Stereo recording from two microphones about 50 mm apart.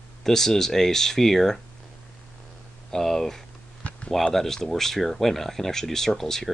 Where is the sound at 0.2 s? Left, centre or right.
Centre.